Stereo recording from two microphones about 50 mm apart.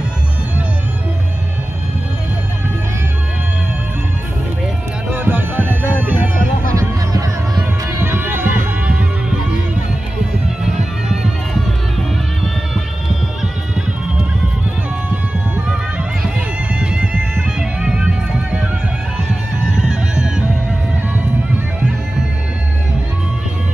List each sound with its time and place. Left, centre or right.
5.1 s music: right
8.0 s run: right
15.7 s music: right
19.9 s music: centre